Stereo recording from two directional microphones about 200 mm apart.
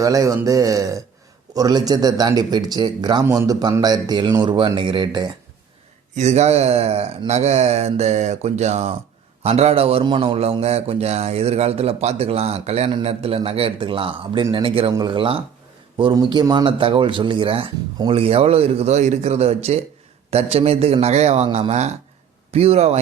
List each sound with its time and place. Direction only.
0.0 s speech: 15° right (ahead or behind)
6.1 s a man's voice: 35° right (ahead or behind)